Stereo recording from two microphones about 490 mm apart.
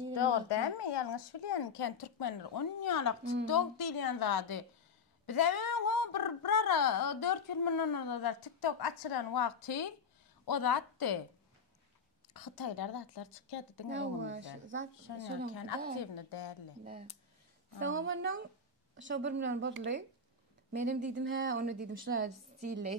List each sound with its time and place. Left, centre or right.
0.1 s a woman's voice: left
12.4 s a woman's voice: left
13.8 s a woman's voice: right
16.2 s a woman's voice: left
17.7 s a woman's voice: right